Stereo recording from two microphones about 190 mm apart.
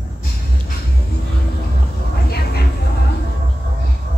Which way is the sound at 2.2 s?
55° left (ahead or behind).